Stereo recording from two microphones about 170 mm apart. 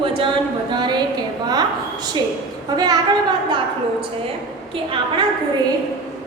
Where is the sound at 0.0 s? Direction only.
30° right (ahead or behind).